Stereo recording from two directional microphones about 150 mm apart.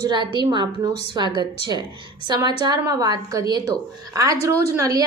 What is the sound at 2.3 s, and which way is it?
A woman's voice, 25° right (ahead or behind).